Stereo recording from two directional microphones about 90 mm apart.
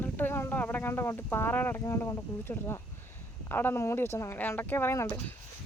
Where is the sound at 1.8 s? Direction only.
35° left (ahead or behind).